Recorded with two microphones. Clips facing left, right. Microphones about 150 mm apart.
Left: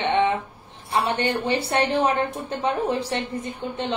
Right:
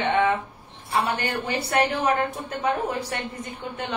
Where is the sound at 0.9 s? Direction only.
25° left (ahead or behind).